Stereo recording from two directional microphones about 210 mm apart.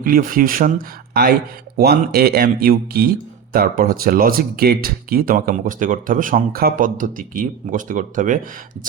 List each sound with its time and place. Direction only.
0.0 s speech: 40° right (ahead or behind)